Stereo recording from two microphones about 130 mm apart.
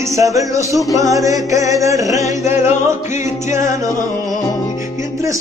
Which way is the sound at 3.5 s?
25° right (ahead or behind).